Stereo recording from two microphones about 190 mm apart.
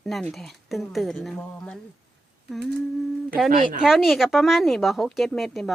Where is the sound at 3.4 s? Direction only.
50° right (ahead or behind).